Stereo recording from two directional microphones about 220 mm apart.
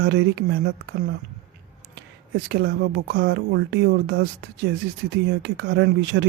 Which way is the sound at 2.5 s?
45° right (ahead or behind).